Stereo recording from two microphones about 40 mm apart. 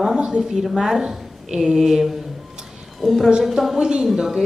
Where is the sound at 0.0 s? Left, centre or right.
Right.